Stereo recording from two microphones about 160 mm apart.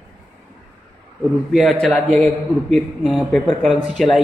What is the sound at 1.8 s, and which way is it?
A man's voice, centre (ahead or behind).